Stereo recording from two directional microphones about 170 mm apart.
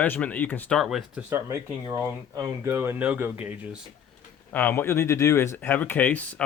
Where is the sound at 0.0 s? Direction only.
10° left (ahead or behind).